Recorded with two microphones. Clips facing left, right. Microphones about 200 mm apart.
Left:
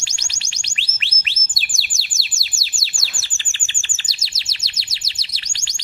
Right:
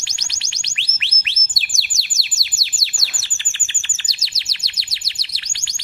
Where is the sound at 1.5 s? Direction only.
30° left (ahead or behind).